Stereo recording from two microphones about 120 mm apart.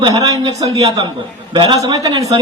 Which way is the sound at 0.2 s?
30° right (ahead or behind).